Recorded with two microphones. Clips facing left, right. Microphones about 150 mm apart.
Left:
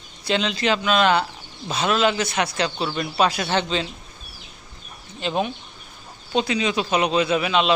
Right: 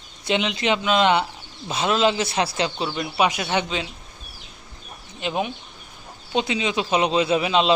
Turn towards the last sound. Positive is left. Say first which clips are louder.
# right 1 dB
turn(degrees=-25)  # may be behind; listen again after turning